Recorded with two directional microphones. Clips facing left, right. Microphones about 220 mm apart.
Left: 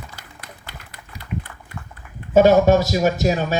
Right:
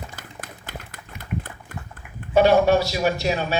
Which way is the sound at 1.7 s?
50° right (ahead or behind).